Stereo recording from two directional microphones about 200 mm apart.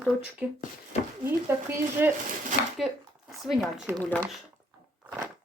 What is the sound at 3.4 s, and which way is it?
Speech, centre (ahead or behind).